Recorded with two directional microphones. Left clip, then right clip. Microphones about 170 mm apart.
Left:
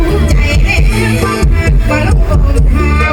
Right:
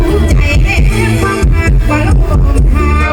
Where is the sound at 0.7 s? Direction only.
40° left (ahead or behind).